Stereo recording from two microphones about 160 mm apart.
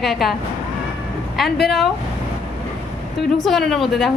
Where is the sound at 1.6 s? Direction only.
Centre (ahead or behind).